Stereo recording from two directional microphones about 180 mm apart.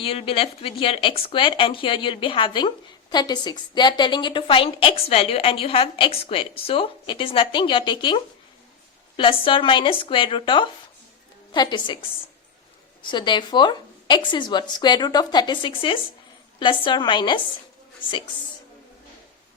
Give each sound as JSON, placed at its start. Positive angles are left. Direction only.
{"t": 0.0, "sound": "speech", "side_deg": 30}
{"t": 13.0, "sound": "speech", "side_deg": 25}